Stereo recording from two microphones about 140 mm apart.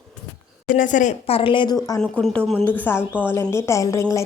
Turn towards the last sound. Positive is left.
turn(degrees=20)  # may be behind; listen again after turning